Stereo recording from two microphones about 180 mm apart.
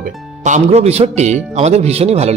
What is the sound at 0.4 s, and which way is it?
Speech, 40° right (ahead or behind).